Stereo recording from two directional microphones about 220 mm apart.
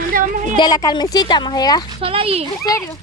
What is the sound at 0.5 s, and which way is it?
A woman's voice, 20° left (ahead or behind).